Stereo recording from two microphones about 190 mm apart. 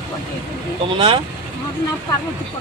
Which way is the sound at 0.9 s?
25° right (ahead or behind).